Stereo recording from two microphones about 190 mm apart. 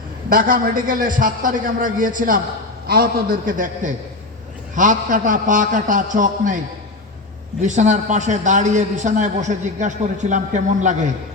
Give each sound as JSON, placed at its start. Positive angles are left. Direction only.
{"t": 0.3, "sound": "a man's voice", "side_deg": -50}
{"t": 7.6, "sound": "a man's voice", "side_deg": -40}